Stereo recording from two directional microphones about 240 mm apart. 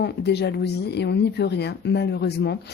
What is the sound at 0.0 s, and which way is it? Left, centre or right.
Speech, left.